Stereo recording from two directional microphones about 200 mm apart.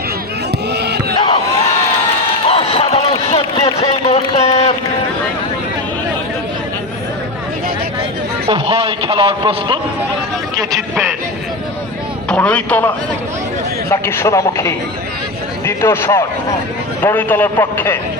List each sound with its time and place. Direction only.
0.7 s crowd: 55° right (ahead or behind)
1.1 s crowd: 25° left (ahead or behind)
2.5 s a sound: 30° left (ahead or behind)
8.4 s a man's voice: 25° right (ahead or behind)
12.3 s a man's voice: 5° left (ahead or behind)
13.9 s a man's voice: 15° left (ahead or behind)